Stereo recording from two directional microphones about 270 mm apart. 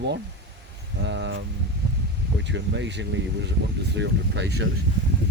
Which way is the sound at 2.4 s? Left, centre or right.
Right.